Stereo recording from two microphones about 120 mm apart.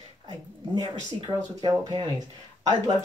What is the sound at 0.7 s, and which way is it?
Speech, 40° right (ahead or behind).